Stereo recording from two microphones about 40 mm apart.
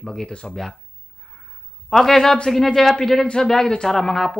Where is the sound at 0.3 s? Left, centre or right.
Left.